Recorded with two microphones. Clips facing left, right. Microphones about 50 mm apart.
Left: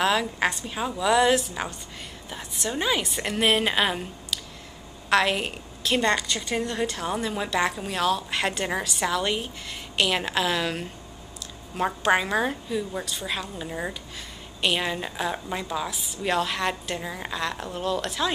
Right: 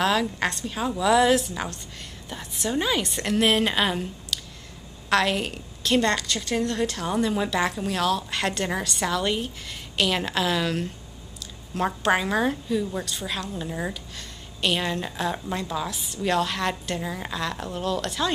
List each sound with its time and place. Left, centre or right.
0.0 s a woman's voice: centre